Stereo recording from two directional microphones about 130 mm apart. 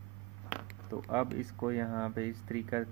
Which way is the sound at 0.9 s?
20° right (ahead or behind).